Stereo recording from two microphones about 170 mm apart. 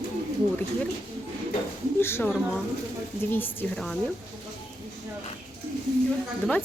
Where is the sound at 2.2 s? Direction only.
Centre (ahead or behind).